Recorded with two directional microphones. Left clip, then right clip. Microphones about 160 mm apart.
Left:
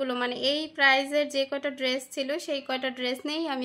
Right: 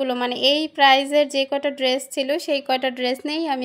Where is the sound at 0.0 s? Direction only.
25° right (ahead or behind).